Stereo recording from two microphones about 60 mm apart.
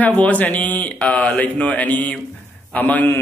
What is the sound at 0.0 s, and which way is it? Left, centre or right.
A man's voice, left.